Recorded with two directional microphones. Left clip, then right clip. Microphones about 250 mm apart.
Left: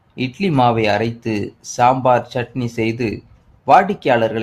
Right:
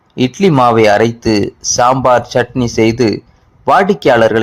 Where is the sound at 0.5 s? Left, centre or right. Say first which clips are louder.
Right 6 dB; centre.